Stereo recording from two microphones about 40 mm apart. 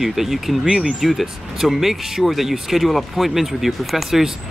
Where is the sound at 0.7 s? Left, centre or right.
Right.